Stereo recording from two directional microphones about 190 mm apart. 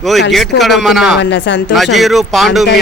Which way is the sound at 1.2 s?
65° left (ahead or behind).